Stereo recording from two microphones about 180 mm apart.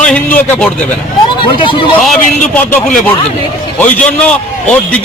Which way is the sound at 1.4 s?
30° left (ahead or behind).